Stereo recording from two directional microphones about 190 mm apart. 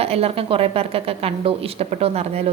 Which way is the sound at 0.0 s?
30° right (ahead or behind).